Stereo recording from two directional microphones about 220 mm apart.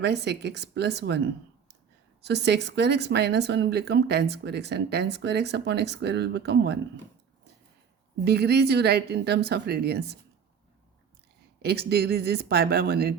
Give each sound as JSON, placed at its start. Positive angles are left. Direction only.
{"t": 0.0, "sound": "speech", "side_deg": -50}
{"t": 8.2, "sound": "speech", "side_deg": -50}
{"t": 11.6, "sound": "speech", "side_deg": -45}